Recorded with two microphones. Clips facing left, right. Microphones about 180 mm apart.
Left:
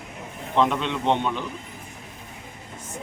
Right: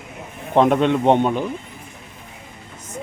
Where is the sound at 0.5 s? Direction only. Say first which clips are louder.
Right 7 dB; 50° right (ahead or behind).